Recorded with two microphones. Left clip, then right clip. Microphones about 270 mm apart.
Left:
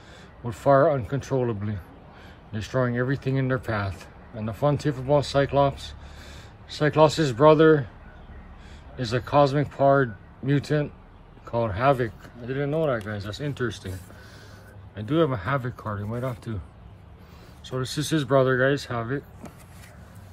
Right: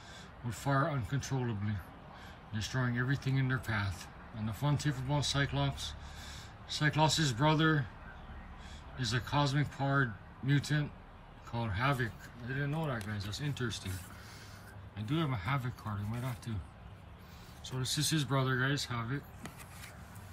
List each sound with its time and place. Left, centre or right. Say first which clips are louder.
0.5 s speech: left 15 dB; centre
8.9 s speech: left 13 dB; centre
12.4 s speech: left 13 dB; centre
13.3 s speech: left 10 dB; centre
15.0 s speech: left 14 dB; centre
17.6 s speech: left 7 dB; centre